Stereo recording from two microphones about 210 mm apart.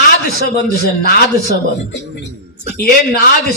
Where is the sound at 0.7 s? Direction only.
50° left (ahead or behind).